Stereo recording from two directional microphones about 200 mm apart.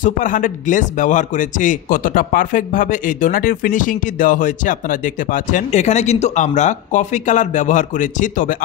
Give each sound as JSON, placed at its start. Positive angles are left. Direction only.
{"t": 0.0, "sound": "a man's voice", "side_deg": 40}